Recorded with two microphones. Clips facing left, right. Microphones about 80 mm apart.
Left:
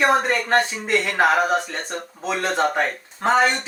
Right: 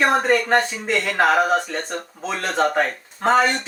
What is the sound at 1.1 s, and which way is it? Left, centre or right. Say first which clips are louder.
Speech: right 2 dB; centre.